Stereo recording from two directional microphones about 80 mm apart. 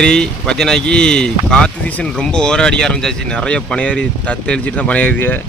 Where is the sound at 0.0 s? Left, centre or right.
Centre.